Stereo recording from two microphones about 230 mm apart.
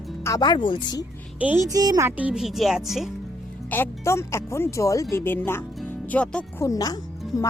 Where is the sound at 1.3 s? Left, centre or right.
Centre.